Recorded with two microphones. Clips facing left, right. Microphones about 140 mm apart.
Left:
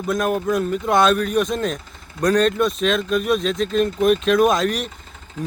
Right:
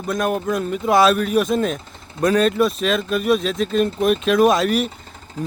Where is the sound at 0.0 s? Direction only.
Centre (ahead or behind).